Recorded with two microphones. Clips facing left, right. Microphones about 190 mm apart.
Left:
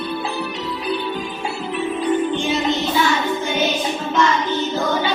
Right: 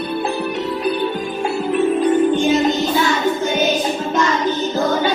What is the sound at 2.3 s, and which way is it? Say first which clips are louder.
Music: right 6 dB; 45° right (ahead or behind).